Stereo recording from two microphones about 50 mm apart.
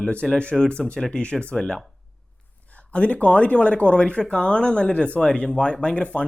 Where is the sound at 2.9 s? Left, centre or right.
Left.